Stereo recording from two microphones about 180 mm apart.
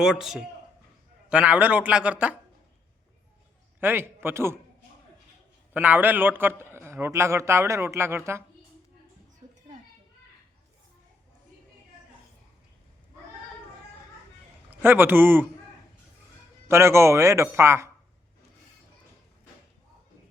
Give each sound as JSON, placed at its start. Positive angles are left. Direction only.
{"t": 0.0, "sound": "a man's voice", "side_deg": 0}
{"t": 3.8, "sound": "a man's voice", "side_deg": -10}
{"t": 5.7, "sound": "a man's voice", "side_deg": -10}
{"t": 14.7, "sound": "speech", "side_deg": -10}
{"t": 16.6, "sound": "a man's voice", "side_deg": -15}